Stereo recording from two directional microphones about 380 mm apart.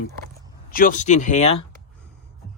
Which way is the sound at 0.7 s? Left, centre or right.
Left.